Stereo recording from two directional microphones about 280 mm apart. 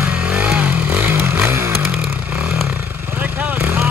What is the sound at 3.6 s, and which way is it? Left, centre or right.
Vehicle, centre.